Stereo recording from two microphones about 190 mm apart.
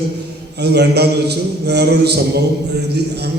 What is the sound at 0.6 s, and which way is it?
A man's voice, 60° right (ahead or behind).